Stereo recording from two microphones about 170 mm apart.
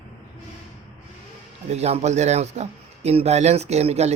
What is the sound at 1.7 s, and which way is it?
Speech, 40° right (ahead or behind).